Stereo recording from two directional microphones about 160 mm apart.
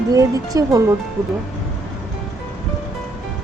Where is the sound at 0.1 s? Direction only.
20° right (ahead or behind).